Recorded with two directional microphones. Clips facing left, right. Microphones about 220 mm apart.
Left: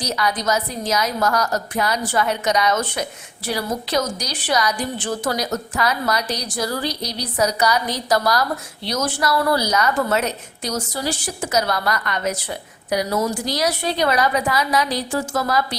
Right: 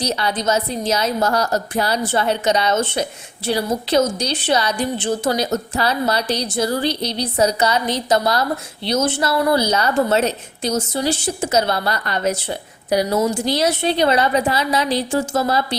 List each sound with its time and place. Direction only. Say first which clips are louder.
0.0 s a woman's voice: right 2 dB; 25° right (ahead or behind)